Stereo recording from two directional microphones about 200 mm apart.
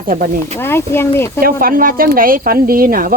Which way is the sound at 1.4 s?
45° right (ahead or behind).